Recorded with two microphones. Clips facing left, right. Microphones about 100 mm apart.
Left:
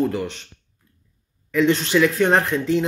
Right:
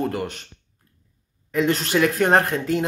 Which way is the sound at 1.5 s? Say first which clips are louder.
Left 3 dB; 40° right (ahead or behind).